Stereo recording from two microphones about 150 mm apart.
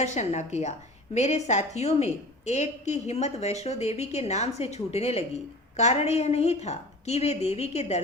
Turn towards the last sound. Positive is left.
turn(degrees=45)  # may be behind; listen again after turning